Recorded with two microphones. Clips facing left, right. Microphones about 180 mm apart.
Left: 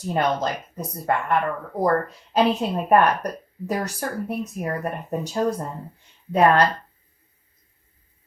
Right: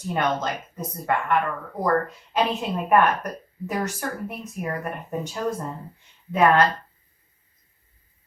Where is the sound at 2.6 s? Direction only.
35° left (ahead or behind).